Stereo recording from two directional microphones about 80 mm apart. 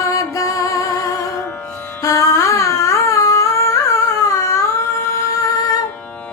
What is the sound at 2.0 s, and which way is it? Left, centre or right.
Humming, left.